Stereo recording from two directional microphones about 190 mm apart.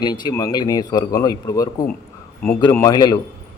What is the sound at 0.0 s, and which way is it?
Speech, 20° left (ahead or behind).